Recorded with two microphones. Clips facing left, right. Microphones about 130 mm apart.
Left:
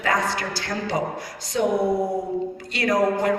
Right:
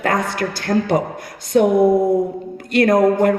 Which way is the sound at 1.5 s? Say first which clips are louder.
Right 8 dB; 55° right (ahead or behind).